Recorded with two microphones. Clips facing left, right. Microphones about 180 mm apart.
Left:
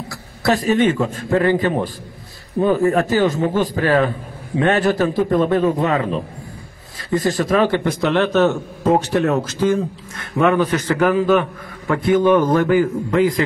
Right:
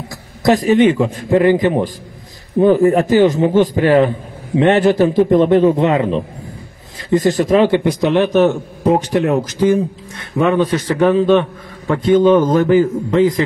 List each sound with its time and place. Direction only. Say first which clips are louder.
0.4 s a man's voice: right 5 dB; 15° right (ahead or behind)